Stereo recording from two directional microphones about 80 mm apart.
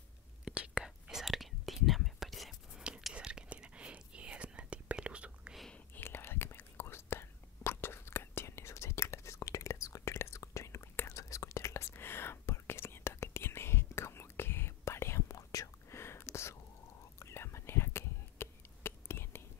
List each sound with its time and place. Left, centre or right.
0.5 s whispering: centre
5.9 s whispering: left
15.2 s whispering: left